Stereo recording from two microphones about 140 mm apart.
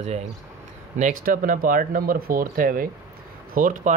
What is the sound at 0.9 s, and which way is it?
Speech, 65° right (ahead or behind).